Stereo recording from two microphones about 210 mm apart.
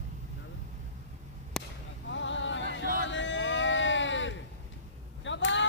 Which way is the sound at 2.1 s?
60° left (ahead or behind).